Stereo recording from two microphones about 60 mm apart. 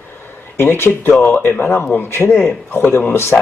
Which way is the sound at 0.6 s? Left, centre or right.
Left.